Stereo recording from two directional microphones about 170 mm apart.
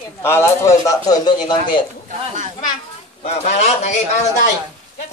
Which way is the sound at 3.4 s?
40° left (ahead or behind).